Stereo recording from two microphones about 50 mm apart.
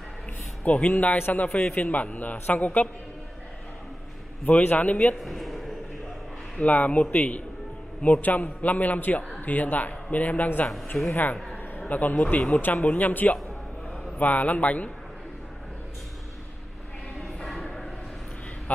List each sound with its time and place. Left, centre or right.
0.7 s a man's voice: left
4.5 s a man's voice: left
5.2 s a sound: centre
6.6 s a man's voice: left
12.4 s a man's voice: left
17.2 s a sound: centre